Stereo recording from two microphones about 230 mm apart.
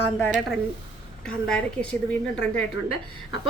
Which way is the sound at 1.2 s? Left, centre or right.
Centre.